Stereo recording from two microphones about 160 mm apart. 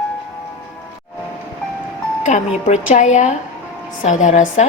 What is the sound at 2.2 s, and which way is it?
A woman's voice, 50° left (ahead or behind).